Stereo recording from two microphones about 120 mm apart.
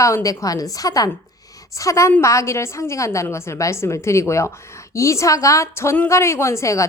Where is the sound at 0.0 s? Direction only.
25° left (ahead or behind).